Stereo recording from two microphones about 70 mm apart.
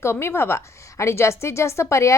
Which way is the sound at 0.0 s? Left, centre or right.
Left.